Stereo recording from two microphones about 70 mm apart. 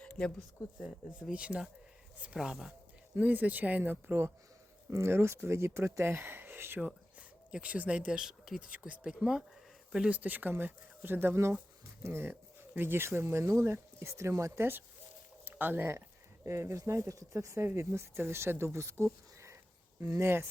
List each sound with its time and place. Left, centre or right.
0.0 s a sound: centre
0.3 s speech: centre
1.3 s speech: centre
3.2 s speech: right
4.9 s speech: right
6.7 s a sound: right
7.5 s speech: centre
10.2 s speech: right
15.4 s a sound: right
16.5 s speech: right